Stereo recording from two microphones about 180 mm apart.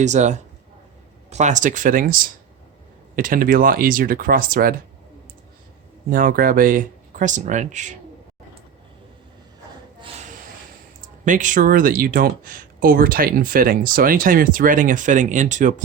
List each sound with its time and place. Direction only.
0.0 s speech: 40° right (ahead or behind)
3.2 s speech: 50° right (ahead or behind)
6.1 s speech: 50° right (ahead or behind)
11.3 s speech: 45° right (ahead or behind)